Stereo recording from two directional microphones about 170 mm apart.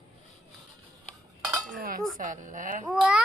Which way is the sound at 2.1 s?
50° right (ahead or behind).